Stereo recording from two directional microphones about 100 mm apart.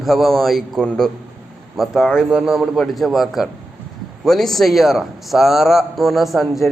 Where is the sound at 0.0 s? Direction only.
Centre (ahead or behind).